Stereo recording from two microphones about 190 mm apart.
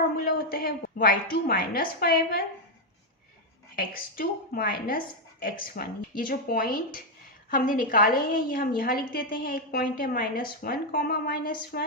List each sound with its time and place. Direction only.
0.3 s a woman's voice: 50° left (ahead or behind)
3.8 s a woman's voice: 50° left (ahead or behind)